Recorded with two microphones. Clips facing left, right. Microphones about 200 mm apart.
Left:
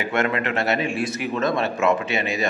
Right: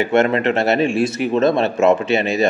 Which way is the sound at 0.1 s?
25° right (ahead or behind).